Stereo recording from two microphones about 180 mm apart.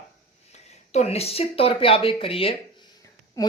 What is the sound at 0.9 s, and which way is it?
A woman's voice, 35° left (ahead or behind).